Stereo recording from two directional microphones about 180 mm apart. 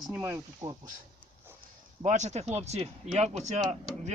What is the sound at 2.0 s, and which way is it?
Speech, 40° right (ahead or behind).